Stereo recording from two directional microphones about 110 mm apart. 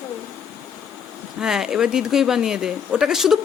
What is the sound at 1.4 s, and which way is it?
Speech, 5° right (ahead or behind).